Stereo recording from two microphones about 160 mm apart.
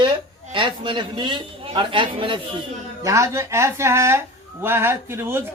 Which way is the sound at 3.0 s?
20° right (ahead or behind).